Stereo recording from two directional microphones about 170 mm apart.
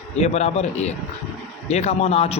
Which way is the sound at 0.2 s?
40° left (ahead or behind).